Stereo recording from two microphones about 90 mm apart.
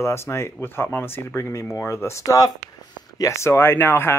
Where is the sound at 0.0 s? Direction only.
30° left (ahead or behind).